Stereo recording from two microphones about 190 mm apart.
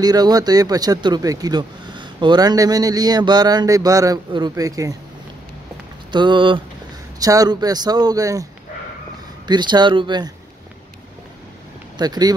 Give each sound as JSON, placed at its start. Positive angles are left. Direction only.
{"t": 0.0, "sound": "speech", "side_deg": -20}
{"t": 6.1, "sound": "speech", "side_deg": -25}
{"t": 9.5, "sound": "speech", "side_deg": -25}
{"t": 12.0, "sound": "speech", "side_deg": -20}